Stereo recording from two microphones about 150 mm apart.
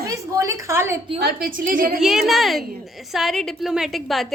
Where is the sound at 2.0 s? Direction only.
5° right (ahead or behind).